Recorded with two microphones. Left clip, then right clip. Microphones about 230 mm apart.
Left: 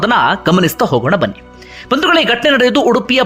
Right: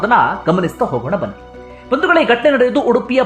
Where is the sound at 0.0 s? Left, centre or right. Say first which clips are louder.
Left 1 dB; centre.